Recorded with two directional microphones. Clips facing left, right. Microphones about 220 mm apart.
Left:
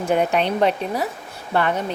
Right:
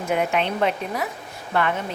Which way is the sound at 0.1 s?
35° left (ahead or behind).